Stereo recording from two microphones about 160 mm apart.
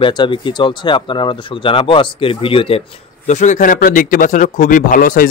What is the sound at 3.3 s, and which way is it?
Speech, 50° left (ahead or behind).